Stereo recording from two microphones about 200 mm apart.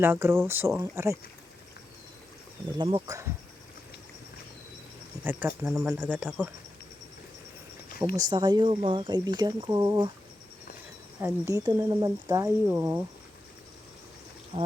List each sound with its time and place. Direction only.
0.0 s speech: 10° right (ahead or behind)
2.7 s speech: 20° right (ahead or behind)
5.2 s speech: 10° right (ahead or behind)
8.2 s speech: 20° right (ahead or behind)
11.2 s speech: 15° right (ahead or behind)
14.5 s speech: 20° right (ahead or behind)